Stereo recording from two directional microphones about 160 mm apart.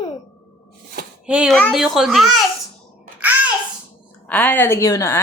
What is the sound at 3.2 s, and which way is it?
Babbling, 10° right (ahead or behind).